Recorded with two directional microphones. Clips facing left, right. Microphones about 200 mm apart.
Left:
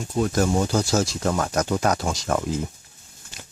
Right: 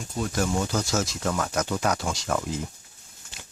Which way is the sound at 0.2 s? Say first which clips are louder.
Left 5 dB; 40° left (ahead or behind).